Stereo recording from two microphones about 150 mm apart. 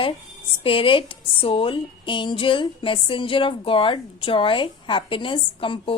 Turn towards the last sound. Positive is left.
turn(degrees=35)  # may be behind; listen again after turning